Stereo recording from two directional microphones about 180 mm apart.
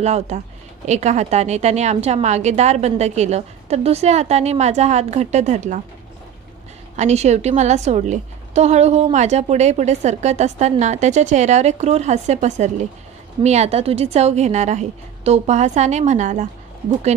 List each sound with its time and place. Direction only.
0.0 s a woman's voice: 40° right (ahead or behind)
7.0 s a woman's voice: 40° right (ahead or behind)